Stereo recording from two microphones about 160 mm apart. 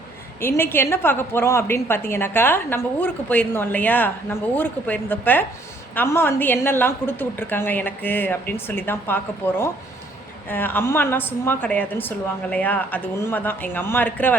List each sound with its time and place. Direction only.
0.4 s a woman's voice: 15° left (ahead or behind)